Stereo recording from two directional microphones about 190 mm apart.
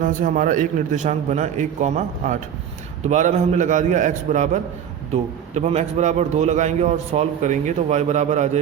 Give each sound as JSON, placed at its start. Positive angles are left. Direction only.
{"t": 0.0, "sound": "a man's voice", "side_deg": -45}